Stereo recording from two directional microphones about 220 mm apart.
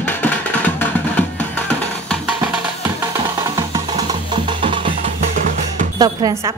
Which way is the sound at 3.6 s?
15° right (ahead or behind).